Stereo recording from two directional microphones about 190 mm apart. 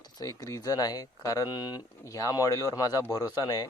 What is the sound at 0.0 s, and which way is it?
Speech, 20° left (ahead or behind).